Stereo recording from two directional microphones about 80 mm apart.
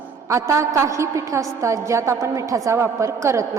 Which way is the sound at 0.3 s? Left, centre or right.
Right.